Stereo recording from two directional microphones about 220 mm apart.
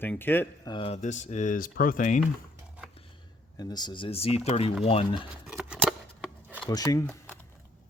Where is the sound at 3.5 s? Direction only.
20° left (ahead or behind).